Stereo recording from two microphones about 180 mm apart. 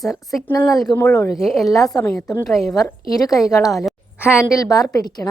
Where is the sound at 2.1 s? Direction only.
20° left (ahead or behind).